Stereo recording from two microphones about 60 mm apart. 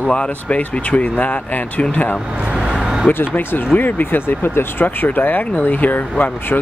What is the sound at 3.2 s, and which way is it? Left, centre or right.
Speech, left.